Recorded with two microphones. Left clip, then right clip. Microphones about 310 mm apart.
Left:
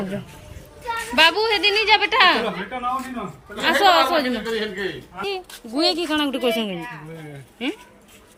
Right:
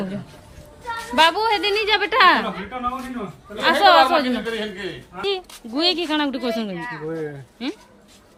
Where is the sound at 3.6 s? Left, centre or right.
Centre.